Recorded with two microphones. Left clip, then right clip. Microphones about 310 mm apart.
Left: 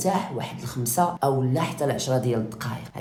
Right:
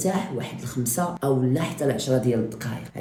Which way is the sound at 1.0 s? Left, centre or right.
Left.